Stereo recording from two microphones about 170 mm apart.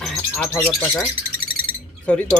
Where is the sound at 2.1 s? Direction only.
5° left (ahead or behind).